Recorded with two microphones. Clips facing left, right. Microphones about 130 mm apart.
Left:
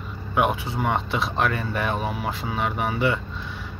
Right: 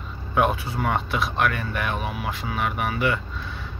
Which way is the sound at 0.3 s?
15° left (ahead or behind).